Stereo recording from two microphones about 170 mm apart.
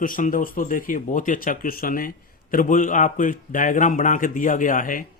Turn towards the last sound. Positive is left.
turn(degrees=50)  # may be behind; listen again after turning